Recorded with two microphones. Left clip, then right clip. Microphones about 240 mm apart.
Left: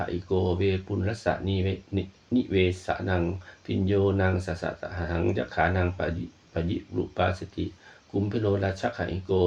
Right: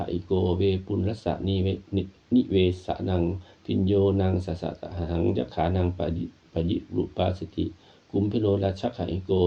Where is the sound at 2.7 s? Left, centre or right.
Centre.